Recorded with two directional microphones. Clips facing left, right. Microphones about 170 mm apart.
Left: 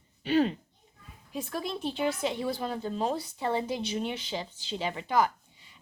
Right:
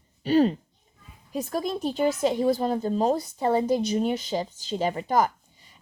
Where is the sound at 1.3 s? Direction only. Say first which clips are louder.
Right 6 dB; 40° right (ahead or behind).